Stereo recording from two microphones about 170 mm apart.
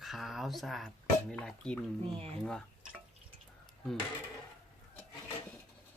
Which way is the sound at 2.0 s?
35° right (ahead or behind).